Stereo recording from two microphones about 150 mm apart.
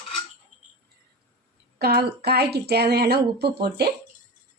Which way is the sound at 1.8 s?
90° right.